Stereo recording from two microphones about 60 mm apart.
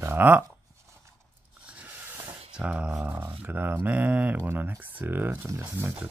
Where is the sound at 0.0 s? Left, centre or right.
Right.